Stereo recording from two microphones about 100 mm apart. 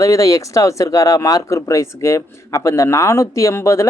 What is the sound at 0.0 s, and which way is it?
Speech, 35° left (ahead or behind).